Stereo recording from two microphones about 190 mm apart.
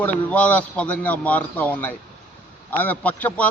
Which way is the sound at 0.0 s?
10° left (ahead or behind).